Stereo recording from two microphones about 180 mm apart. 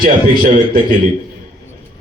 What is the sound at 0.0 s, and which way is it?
Speech, 50° right (ahead or behind).